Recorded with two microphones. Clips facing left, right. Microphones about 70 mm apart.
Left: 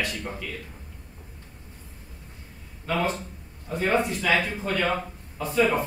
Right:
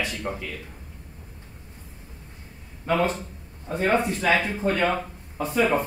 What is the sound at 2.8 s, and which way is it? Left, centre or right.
Speech, right.